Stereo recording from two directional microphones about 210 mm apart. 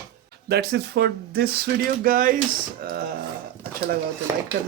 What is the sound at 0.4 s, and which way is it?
Speech, 50° right (ahead or behind).